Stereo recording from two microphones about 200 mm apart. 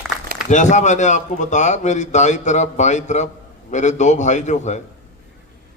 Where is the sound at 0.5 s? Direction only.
35° left (ahead or behind).